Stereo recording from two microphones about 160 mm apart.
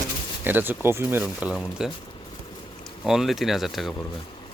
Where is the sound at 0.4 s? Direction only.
10° right (ahead or behind).